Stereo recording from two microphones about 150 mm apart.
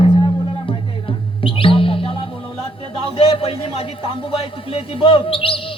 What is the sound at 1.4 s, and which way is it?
Music, 35° left (ahead or behind).